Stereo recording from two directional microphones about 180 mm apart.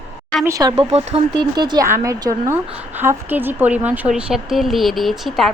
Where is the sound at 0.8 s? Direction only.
35° right (ahead or behind); by 5.5 s centre (ahead or behind).